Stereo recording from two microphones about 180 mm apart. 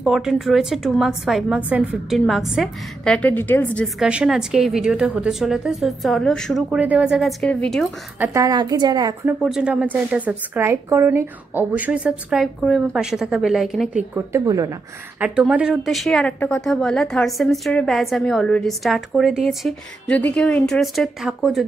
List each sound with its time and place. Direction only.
0.0 s speech: centre (ahead or behind)
4.0 s speech: 5° right (ahead or behind)
8.2 s a woman's voice: 15° right (ahead or behind)
9.4 s a woman's voice: 5° right (ahead or behind); by 14.8 s 20° right (ahead or behind)
15.1 s speech: 5° right (ahead or behind)